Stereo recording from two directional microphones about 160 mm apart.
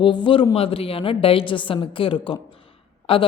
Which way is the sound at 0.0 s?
30° left (ahead or behind).